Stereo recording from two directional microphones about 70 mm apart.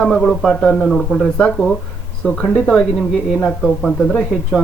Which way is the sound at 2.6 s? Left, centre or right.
Centre.